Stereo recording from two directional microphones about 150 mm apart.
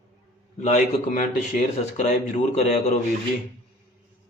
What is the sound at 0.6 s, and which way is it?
A man's voice, 50° left (ahead or behind).